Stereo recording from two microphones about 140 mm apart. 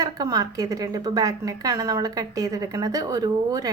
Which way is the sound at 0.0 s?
25° right (ahead or behind).